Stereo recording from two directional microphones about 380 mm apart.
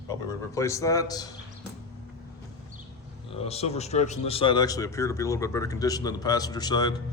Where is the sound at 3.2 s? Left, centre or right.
Centre.